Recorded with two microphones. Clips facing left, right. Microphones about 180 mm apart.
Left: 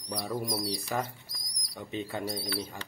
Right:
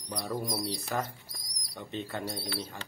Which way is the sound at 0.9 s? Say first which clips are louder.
Left 1 dB; 5° left (ahead or behind).